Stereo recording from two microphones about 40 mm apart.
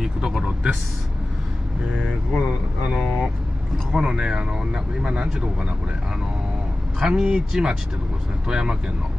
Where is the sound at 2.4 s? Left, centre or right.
Right.